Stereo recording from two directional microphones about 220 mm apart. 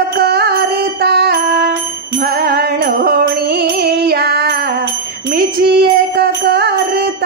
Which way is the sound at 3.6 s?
45° right (ahead or behind).